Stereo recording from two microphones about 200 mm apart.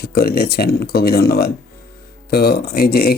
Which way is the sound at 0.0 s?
50° left (ahead or behind).